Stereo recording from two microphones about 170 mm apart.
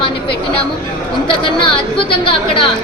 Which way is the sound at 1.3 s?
30° left (ahead or behind).